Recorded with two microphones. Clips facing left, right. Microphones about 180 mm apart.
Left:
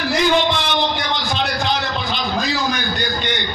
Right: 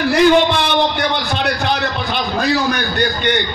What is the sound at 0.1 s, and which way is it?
A man's voice, 60° right (ahead or behind).